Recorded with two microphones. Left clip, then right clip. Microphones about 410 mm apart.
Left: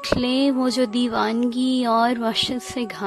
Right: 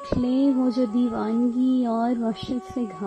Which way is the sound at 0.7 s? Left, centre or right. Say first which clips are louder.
Left 3 dB; left.